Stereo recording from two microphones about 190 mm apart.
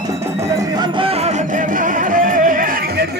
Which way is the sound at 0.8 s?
30° right (ahead or behind).